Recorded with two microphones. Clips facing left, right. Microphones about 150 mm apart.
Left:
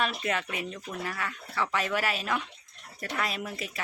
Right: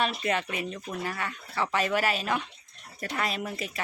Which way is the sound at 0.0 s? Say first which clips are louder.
Right 2 dB; centre (ahead or behind).